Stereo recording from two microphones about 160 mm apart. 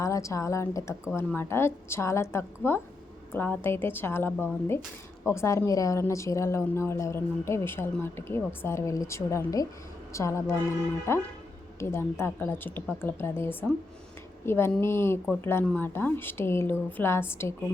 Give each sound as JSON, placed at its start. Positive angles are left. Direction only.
{"t": 0.0, "sound": "a woman's voice", "side_deg": 20}